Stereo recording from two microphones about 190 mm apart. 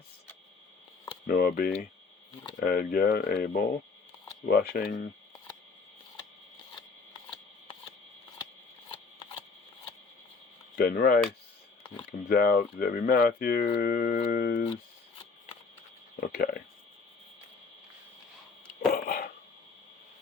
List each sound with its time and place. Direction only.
1.3 s speech: 50° left (ahead or behind)
10.8 s speech: 50° left (ahead or behind)
12.3 s speech: 50° left (ahead or behind)
16.2 s speech: 50° left (ahead or behind)
18.9 s dog: 50° left (ahead or behind)